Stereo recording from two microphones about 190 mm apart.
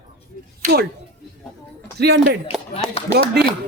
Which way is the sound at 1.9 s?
60° right (ahead or behind).